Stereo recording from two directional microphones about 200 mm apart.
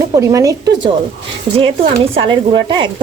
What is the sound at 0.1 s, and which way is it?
Speech, 20° right (ahead or behind).